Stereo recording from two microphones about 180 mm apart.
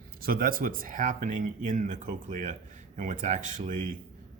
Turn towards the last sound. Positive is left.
turn(degrees=-45)  # may be behind; listen again after turning